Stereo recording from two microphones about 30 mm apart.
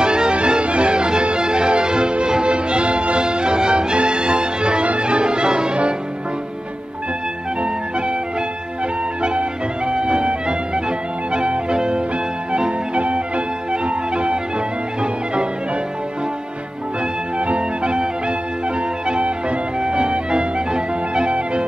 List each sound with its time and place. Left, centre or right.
0.0 s music: right
9.2 s music: right
12.9 s music: right
17.4 s music: right
19.0 s music: right